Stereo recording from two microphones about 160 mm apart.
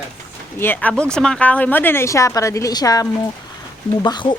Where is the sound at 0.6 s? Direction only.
10° left (ahead or behind); by 4.4 s 30° left (ahead or behind).